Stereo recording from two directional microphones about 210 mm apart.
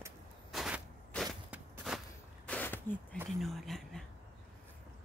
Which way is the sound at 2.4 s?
10° left (ahead or behind).